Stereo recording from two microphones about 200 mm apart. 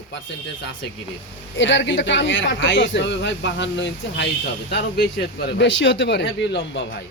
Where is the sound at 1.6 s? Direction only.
65° left (ahead or behind).